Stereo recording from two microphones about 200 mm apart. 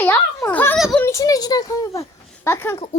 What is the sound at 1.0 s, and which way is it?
Speech, 15° left (ahead or behind).